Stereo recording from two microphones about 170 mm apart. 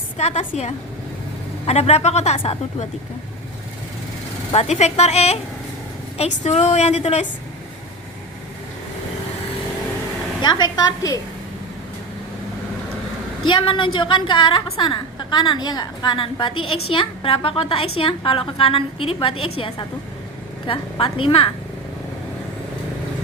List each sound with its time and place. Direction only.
0.2 s a woman's voice: 40° left (ahead or behind)
4.5 s a woman's voice: 40° left (ahead or behind)
6.4 s a woman's voice: 40° left (ahead or behind)
10.4 s a woman's voice: 25° left (ahead or behind)
13.5 s a woman's voice: 30° left (ahead or behind)